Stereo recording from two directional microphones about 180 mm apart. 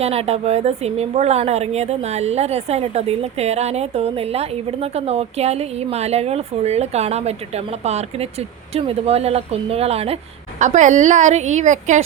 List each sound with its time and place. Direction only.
0.0 s a woman's voice: 35° right (ahead or behind)